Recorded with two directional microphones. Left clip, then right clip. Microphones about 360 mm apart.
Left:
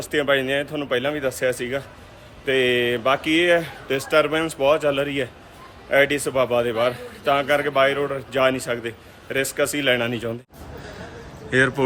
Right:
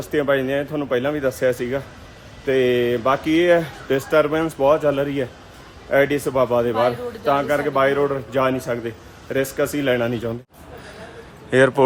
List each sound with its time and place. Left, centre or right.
0.0 s a man's voice: centre
10.8 s a sound: centre
11.5 s a man's voice: centre